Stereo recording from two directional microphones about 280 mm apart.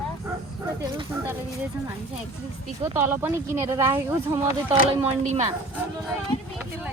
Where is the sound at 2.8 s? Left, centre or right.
Centre.